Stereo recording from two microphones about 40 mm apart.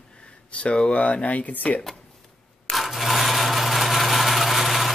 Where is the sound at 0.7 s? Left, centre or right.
Left.